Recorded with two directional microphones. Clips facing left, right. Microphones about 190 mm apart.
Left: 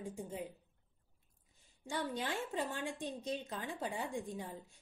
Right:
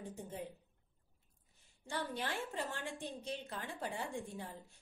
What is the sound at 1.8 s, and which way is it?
A woman's voice, 15° left (ahead or behind).